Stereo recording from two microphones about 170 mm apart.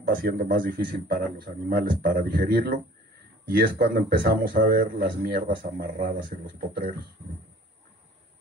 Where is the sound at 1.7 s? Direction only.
55° right (ahead or behind).